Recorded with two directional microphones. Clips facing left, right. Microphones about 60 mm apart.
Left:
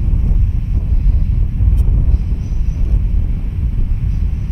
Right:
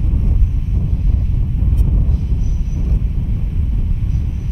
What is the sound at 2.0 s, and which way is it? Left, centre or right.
Train, left.